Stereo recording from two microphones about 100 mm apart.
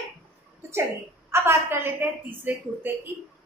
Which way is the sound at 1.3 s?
25° right (ahead or behind).